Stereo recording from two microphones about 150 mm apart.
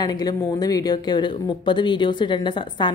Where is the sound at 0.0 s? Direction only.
25° left (ahead or behind).